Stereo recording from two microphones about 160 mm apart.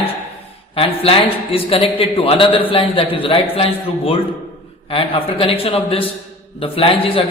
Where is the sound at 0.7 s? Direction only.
35° left (ahead or behind).